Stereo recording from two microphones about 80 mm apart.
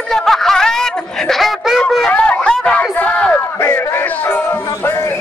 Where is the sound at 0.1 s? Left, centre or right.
Centre.